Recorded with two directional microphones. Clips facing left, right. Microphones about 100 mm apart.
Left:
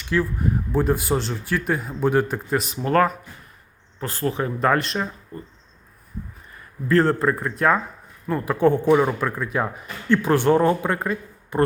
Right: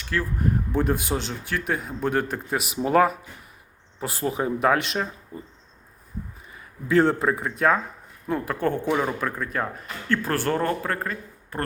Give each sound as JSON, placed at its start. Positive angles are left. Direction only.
{"t": 0.0, "sound": "speech", "side_deg": 5}
{"t": 4.7, "sound": "speech", "side_deg": 0}
{"t": 6.5, "sound": "speech", "side_deg": -5}
{"t": 8.5, "sound": "speech", "side_deg": 10}